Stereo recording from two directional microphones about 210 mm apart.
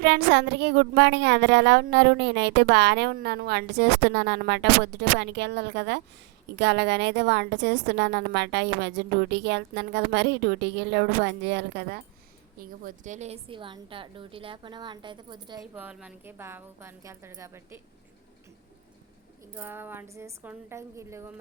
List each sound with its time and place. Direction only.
0.0 s a woman's voice: 50° right (ahead or behind)
12.5 s a woman's voice: 35° right (ahead or behind); by 15.6 s 20° right (ahead or behind)
15.7 s a woman's voice: 5° right (ahead or behind)
19.5 s a woman's voice: 10° right (ahead or behind)